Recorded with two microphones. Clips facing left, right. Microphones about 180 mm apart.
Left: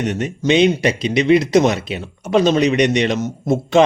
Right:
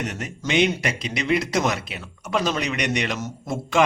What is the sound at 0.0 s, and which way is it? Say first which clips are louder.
Speech: left 9 dB; 20° left (ahead or behind).